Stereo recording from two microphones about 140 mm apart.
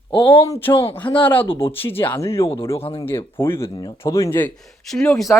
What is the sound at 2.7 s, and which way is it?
Speech, 45° left (ahead or behind).